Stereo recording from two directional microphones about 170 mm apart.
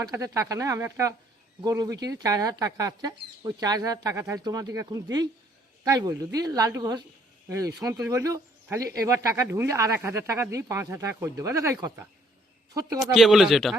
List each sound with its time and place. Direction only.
0.1 s speech: 20° right (ahead or behind)
13.0 s speech: centre (ahead or behind)